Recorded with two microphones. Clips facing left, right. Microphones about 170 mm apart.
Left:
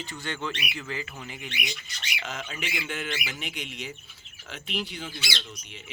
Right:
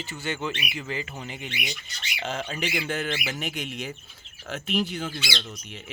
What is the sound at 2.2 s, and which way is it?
Speech, 30° right (ahead or behind).